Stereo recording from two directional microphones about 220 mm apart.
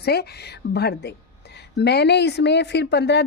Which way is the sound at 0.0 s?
45° left (ahead or behind).